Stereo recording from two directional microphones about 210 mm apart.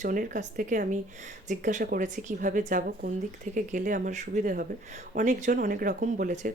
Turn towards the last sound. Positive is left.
turn(degrees=-40)  # may be behind; listen again after turning